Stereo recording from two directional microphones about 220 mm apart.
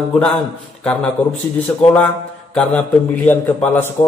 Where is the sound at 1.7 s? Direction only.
5° left (ahead or behind).